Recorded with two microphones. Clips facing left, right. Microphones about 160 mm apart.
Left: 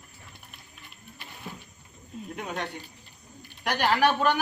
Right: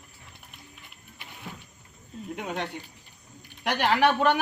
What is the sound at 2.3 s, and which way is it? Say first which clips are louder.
A man's voice: right 2 dB; 20° right (ahead or behind).